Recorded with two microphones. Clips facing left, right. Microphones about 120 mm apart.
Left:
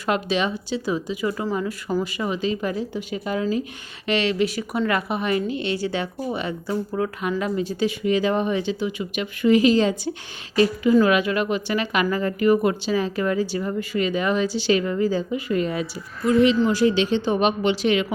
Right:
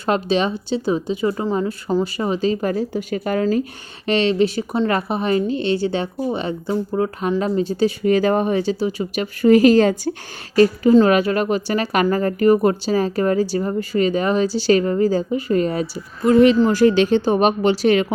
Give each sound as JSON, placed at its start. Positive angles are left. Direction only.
{"t": 0.0, "sound": "a woman's voice", "side_deg": -30}
{"t": 8.0, "sound": "a woman's voice", "side_deg": -45}